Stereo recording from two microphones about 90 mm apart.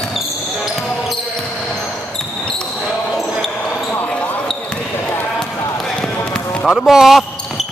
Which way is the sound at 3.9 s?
15° left (ahead or behind).